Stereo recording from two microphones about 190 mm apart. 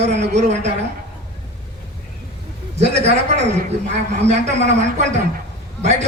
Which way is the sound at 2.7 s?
35° right (ahead or behind).